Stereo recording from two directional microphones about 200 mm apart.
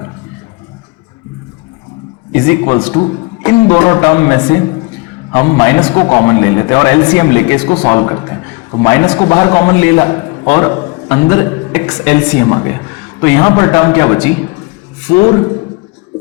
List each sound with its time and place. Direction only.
2.3 s speech: 15° left (ahead or behind)
2.7 s a man's voice: 25° left (ahead or behind)
3.4 s speech: 15° left (ahead or behind)
7.7 s a man's voice: 25° left (ahead or behind)